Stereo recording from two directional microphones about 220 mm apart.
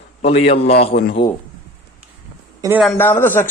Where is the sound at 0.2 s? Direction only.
30° left (ahead or behind).